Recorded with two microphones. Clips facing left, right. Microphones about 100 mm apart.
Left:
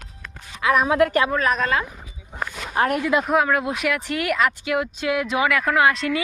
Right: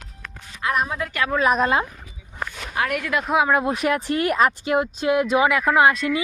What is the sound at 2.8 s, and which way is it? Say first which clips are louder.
Speech: left 3 dB; 35° left (ahead or behind).